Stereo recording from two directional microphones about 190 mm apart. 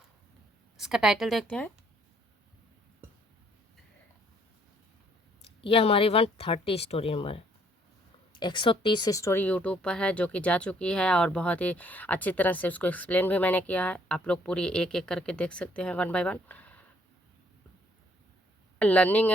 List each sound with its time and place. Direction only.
0.8 s a woman's voice: centre (ahead or behind)
5.6 s speech: 30° left (ahead or behind); by 16.8 s 10° left (ahead or behind)
18.8 s speech: 10° left (ahead or behind)